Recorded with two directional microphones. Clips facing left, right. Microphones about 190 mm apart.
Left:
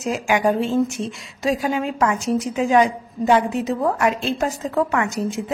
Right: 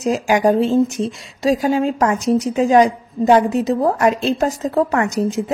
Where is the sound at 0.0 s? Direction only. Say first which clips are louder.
Right 4 dB; 35° right (ahead or behind).